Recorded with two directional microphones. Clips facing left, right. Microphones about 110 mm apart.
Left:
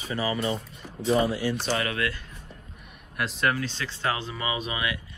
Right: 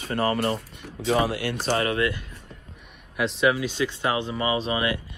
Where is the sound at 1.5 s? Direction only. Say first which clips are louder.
Right 3 dB; 45° right (ahead or behind).